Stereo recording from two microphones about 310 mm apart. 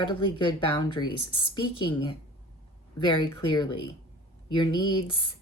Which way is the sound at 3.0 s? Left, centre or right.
Centre.